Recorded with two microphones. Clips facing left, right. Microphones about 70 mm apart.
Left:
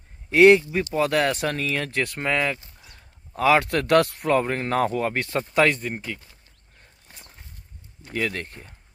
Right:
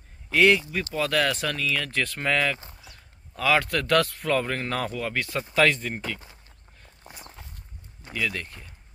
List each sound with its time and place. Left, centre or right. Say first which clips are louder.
0.3 s speech: left 6 dB; left
5.5 s speech: left 1 dB; centre
8.1 s speech: left 2 dB; left